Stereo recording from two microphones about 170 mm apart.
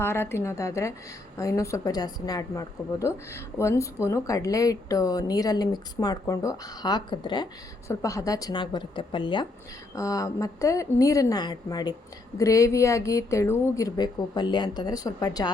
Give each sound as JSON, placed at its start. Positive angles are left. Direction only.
{"t": 0.0, "sound": "a woman's voice", "side_deg": 15}